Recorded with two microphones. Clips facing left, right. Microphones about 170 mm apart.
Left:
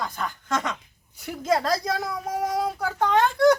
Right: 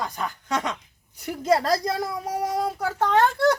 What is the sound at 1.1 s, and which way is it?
Speech, centre (ahead or behind).